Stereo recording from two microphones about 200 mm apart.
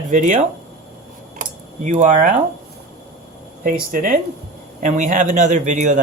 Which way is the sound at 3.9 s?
45° right (ahead or behind).